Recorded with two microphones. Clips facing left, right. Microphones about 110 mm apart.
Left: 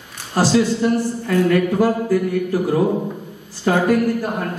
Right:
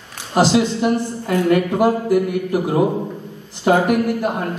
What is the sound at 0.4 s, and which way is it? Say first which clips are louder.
A woman's voice: right 1 dB; 20° right (ahead or behind).